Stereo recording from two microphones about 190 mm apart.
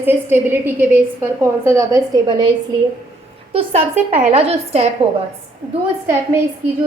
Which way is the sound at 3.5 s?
30° right (ahead or behind).